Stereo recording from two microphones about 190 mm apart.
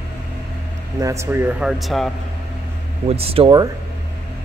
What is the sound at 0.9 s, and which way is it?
Speech, 15° right (ahead or behind).